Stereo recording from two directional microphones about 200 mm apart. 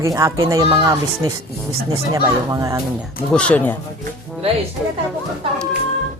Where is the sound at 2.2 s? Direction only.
15° right (ahead or behind).